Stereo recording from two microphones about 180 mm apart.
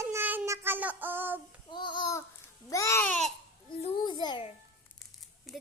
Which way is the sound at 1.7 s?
25° left (ahead or behind).